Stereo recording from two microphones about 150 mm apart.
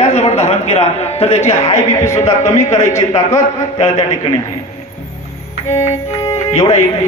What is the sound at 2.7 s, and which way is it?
Speech, 20° left (ahead or behind).